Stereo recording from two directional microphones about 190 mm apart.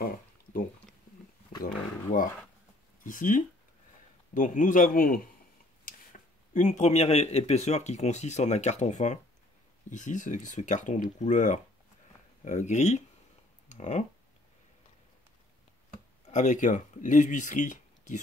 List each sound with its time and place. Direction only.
1.6 s a sound: 45° left (ahead or behind)
3.0 s a man's voice: 45° left (ahead or behind)
16.3 s speech: 40° left (ahead or behind)